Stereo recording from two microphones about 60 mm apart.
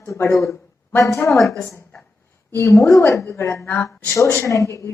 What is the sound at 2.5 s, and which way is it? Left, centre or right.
A woman's voice, left.